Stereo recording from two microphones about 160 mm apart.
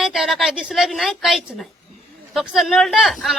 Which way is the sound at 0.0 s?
Centre (ahead or behind).